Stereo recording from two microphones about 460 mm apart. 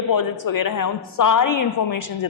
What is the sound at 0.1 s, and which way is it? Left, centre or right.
A woman's voice, left.